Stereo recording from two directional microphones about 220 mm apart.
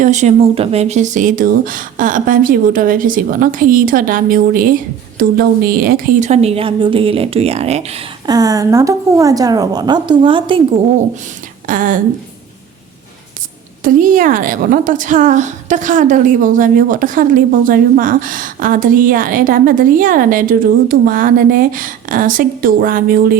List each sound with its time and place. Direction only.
0.0 s a woman's voice: 35° right (ahead or behind)
8.3 s a woman's voice: 15° right (ahead or behind)
11.6 s a woman's voice: 35° right (ahead or behind)
13.8 s a woman's voice: 35° right (ahead or behind)